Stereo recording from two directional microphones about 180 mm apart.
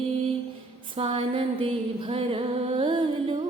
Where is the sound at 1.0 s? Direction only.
30° right (ahead or behind).